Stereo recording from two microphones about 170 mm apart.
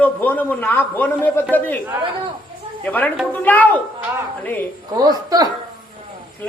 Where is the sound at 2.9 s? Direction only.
10° left (ahead or behind).